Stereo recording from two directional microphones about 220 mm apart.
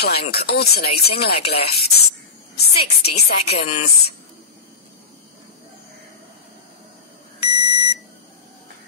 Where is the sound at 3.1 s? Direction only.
30° left (ahead or behind).